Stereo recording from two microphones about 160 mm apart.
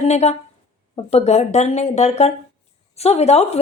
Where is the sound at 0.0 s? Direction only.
45° left (ahead or behind).